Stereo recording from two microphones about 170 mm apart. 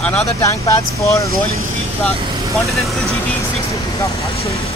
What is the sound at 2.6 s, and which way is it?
Speech, centre (ahead or behind).